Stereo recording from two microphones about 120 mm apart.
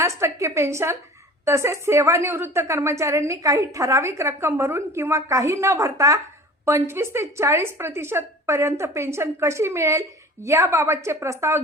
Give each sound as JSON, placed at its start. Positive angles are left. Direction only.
{"t": 0.0, "sound": "a woman's voice", "side_deg": -25}